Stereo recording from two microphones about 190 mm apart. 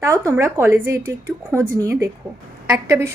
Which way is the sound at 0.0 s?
15° right (ahead or behind).